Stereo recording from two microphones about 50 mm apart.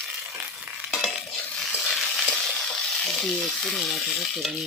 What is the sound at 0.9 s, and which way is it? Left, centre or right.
Stir, centre.